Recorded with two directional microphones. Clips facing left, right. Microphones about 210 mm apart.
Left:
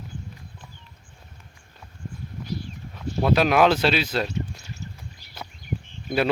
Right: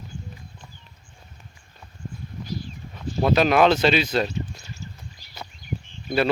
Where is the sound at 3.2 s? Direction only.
5° left (ahead or behind).